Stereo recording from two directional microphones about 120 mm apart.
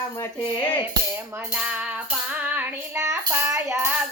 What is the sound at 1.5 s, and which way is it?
Music, 10° right (ahead or behind).